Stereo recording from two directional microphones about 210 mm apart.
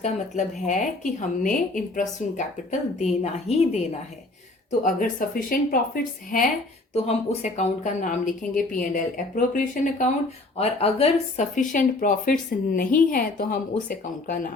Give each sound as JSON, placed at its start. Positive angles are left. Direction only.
{"t": 0.0, "sound": "speech", "side_deg": 35}
{"t": 4.8, "sound": "speech", "side_deg": 40}
{"t": 10.6, "sound": "speech", "side_deg": 30}